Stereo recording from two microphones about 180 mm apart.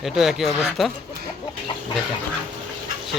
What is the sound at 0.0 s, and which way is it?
Speech, centre (ahead or behind).